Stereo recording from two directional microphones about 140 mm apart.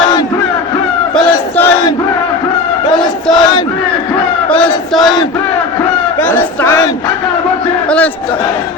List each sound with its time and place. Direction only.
1.1 s battle cry: 10° left (ahead or behind)
3.0 s battle cry: 5° left (ahead or behind)
4.6 s battle cry: centre (ahead or behind)
6.1 s battle cry: 15° left (ahead or behind)
7.9 s battle cry: 10° left (ahead or behind)